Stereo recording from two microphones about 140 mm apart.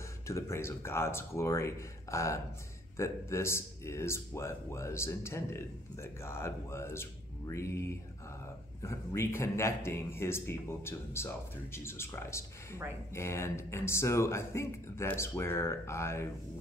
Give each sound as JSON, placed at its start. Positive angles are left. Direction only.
{"t": 0.3, "sound": "speech", "side_deg": 20}